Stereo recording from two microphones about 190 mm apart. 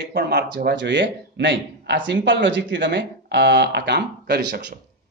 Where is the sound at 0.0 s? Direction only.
55° right (ahead or behind).